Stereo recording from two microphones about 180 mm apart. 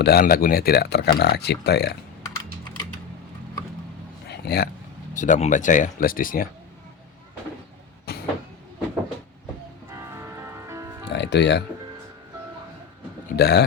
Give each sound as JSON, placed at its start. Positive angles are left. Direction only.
{"t": 0.0, "sound": "speech", "side_deg": 60}
{"t": 4.3, "sound": "a sound", "side_deg": 60}
{"t": 5.1, "sound": "speech", "side_deg": 45}
{"t": 8.1, "sound": "vehicle", "side_deg": 60}
{"t": 9.9, "sound": "music", "side_deg": -15}
{"t": 11.1, "sound": "speech", "side_deg": 75}
{"t": 13.3, "sound": "speech", "side_deg": 65}